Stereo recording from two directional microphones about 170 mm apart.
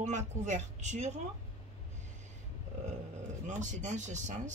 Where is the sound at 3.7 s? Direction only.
45° right (ahead or behind).